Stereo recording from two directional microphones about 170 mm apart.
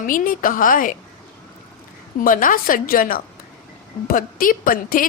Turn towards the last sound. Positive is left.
turn(degrees=55)  # may be behind; listen again after turning